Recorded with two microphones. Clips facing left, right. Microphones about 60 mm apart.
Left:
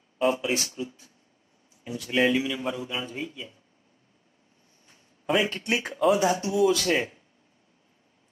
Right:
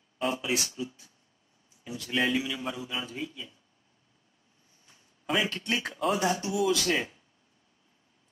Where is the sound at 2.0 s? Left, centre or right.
Left.